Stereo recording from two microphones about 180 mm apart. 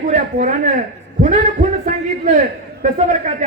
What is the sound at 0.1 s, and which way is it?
A man's voice, 45° right (ahead or behind).